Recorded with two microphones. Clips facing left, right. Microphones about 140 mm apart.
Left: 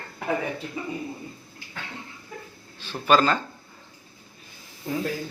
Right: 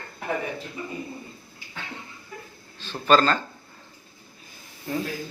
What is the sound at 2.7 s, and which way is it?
Speech, 10° left (ahead or behind).